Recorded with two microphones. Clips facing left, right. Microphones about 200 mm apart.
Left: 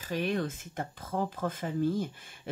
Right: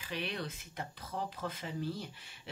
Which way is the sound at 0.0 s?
45° left (ahead or behind).